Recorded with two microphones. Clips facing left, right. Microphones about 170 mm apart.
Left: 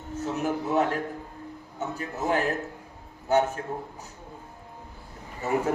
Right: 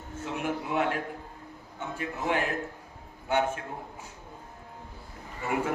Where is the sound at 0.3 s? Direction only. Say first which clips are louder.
Left 4 dB; 40° left (ahead or behind).